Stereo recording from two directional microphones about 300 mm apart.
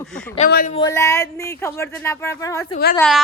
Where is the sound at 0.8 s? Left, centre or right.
Centre.